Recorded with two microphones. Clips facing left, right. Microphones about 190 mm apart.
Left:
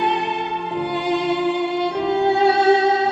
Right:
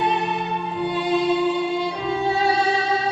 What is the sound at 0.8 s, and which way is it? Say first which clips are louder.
Music: even; 65° left (ahead or behind).